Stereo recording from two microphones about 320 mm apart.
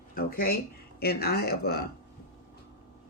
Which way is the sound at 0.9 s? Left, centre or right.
Left.